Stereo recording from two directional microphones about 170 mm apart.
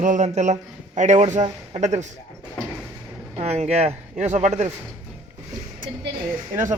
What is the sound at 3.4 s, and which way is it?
Speech, 40° right (ahead or behind).